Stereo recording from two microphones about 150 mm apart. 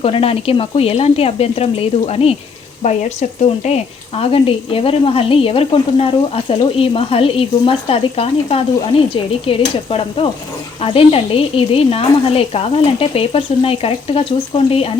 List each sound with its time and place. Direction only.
0.0 s speech: 40° left (ahead or behind)